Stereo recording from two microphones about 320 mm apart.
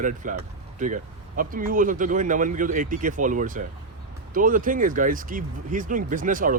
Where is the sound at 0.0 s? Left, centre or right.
Right.